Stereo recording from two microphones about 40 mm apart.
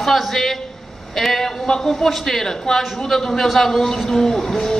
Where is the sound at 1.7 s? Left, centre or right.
Centre.